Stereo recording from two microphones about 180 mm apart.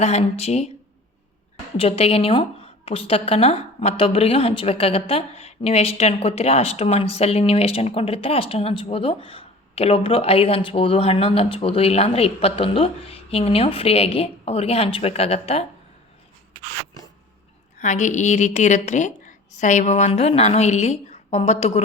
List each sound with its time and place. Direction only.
0.0 s a woman's voice: 35° left (ahead or behind)
1.7 s a woman's voice: 35° left (ahead or behind)
17.7 s a woman's voice: 45° left (ahead or behind)